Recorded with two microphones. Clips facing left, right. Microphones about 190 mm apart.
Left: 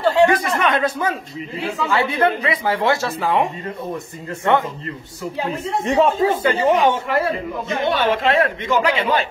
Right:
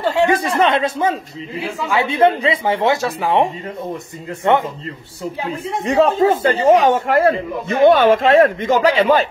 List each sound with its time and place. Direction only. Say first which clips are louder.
0.4 s a woman's voice: right 3 dB; 30° right (ahead or behind)
4.4 s a woman's voice: right 2 dB; 20° right (ahead or behind)
5.9 s speech: right 3 dB; 40° right (ahead or behind)